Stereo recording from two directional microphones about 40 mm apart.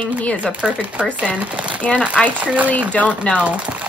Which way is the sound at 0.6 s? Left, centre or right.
Right.